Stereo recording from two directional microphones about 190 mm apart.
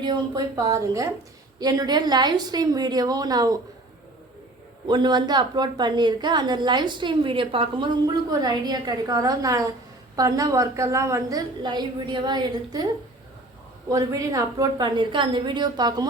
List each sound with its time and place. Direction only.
0.0 s a woman's voice: 20° right (ahead or behind)
4.9 s a woman's voice: 25° right (ahead or behind)
13.9 s a woman's voice: 15° right (ahead or behind)